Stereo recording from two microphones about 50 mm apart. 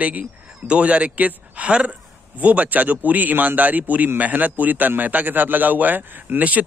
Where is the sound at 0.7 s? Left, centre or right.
Right.